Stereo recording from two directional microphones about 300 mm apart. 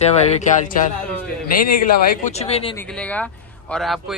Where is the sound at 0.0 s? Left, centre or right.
Left.